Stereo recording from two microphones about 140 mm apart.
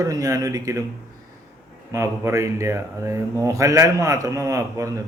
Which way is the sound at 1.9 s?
20° right (ahead or behind).